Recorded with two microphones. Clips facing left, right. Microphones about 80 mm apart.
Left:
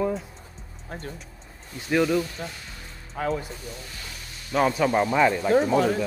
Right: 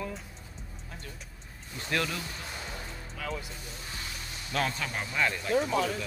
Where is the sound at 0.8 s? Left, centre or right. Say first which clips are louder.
Left 11 dB; left.